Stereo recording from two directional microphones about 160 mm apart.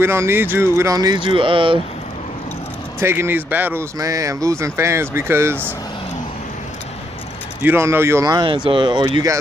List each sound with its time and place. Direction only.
0.0 s speech: 15° right (ahead or behind); by 1.8 s 35° right (ahead or behind)
3.0 s speech: 15° right (ahead or behind)
7.6 s speech: 15° right (ahead or behind)